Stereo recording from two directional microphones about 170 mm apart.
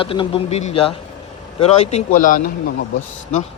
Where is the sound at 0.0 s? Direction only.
30° left (ahead or behind); by 2.8 s 65° left (ahead or behind).